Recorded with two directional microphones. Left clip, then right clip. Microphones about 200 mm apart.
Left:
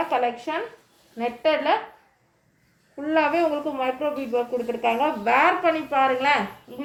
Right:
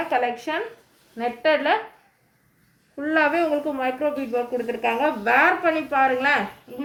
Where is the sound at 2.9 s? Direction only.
25° right (ahead or behind).